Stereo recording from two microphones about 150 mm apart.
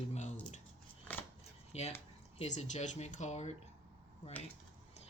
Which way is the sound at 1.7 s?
45° left (ahead or behind).